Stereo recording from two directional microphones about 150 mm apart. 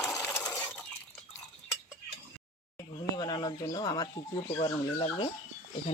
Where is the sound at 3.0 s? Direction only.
25° left (ahead or behind).